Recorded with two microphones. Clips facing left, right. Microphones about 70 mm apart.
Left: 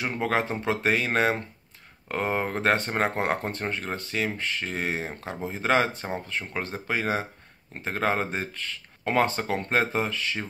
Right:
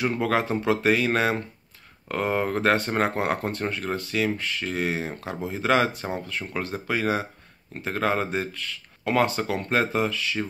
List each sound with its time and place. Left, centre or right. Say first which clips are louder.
0.0 s speech: right 2 dB; left